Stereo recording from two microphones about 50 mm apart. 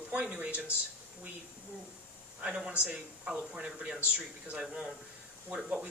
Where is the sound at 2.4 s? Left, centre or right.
Right.